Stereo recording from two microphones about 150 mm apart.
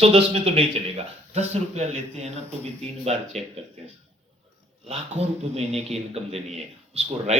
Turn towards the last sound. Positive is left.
turn(degrees=-45)  # may be behind; listen again after turning